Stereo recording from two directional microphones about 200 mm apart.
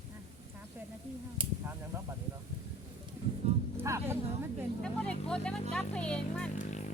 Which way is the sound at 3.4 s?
30° right (ahead or behind).